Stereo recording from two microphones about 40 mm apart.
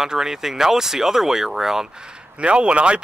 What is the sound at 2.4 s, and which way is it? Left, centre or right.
Speech, right.